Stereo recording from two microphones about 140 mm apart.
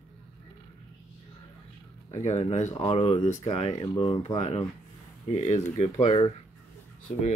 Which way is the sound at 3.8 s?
35° left (ahead or behind).